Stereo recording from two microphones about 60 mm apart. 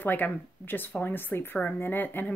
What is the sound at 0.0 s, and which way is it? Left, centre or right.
Speech, left.